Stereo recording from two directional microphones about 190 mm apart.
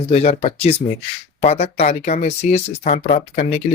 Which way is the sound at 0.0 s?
35° left (ahead or behind).